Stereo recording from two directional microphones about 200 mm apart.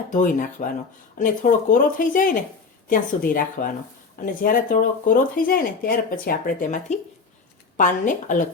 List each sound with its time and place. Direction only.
0.1 s speech: 40° left (ahead or behind)